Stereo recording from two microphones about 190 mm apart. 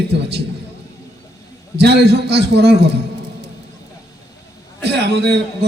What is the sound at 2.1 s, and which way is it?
Speech, 60° right (ahead or behind).